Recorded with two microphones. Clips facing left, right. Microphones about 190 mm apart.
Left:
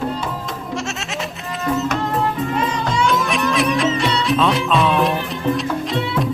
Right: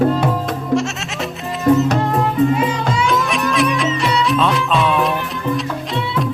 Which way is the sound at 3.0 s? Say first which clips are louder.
Right 1 dB; centre (ahead or behind).